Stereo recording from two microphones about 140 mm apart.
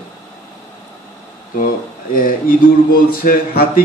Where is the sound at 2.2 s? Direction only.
90° left.